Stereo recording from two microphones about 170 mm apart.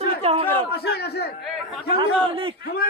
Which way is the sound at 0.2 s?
35° right (ahead or behind).